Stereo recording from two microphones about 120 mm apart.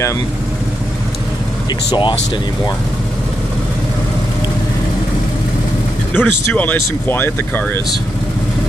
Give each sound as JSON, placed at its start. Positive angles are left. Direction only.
{"t": 1.9, "sound": "speech", "side_deg": 40}
{"t": 6.1, "sound": "speech", "side_deg": 15}